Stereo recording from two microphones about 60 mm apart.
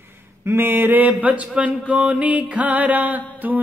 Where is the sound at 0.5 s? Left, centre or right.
Right.